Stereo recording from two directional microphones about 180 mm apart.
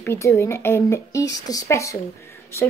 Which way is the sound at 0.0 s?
15° left (ahead or behind).